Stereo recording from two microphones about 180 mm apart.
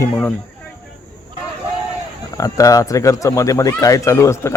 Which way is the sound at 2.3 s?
20° left (ahead or behind).